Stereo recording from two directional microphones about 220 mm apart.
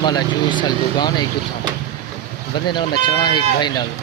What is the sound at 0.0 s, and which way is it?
Speech, 20° left (ahead or behind).